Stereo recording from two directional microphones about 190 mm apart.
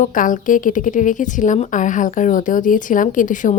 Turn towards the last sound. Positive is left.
turn(degrees=45)  # may be behind; listen again after turning